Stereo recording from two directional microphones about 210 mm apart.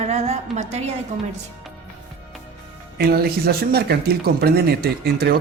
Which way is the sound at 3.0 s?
45° right (ahead or behind).